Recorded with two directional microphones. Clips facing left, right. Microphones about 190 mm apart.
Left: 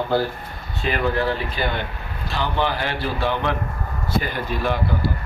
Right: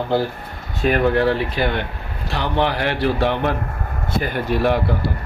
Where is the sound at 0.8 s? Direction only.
45° right (ahead or behind); by 3.4 s 70° right (ahead or behind).